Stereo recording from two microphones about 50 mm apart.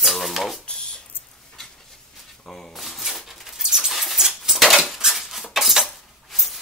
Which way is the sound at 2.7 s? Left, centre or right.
Centre.